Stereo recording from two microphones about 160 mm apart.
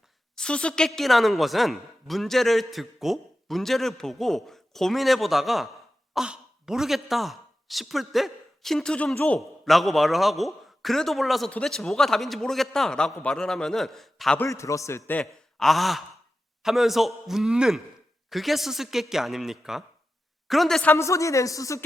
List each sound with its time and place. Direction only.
0.3 s speech: 5° left (ahead or behind)
14.3 s a man's voice: 20° left (ahead or behind)
15.2 s a man's voice: centre (ahead or behind)
20.9 s speech: 20° left (ahead or behind)